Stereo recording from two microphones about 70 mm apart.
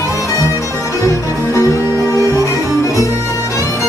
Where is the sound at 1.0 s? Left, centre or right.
Left.